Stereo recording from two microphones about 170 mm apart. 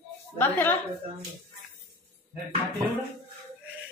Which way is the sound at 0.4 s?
10° left (ahead or behind).